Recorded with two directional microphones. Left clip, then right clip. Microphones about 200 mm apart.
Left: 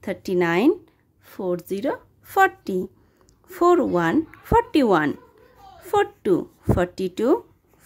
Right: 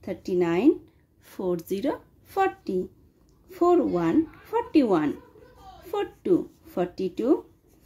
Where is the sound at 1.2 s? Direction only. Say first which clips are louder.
Left 2 dB; 20° left (ahead or behind).